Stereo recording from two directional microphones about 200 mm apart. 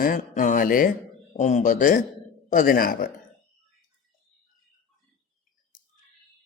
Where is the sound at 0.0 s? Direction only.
40° left (ahead or behind).